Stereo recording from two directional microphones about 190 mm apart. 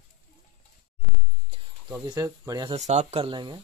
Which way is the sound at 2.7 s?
35° right (ahead or behind).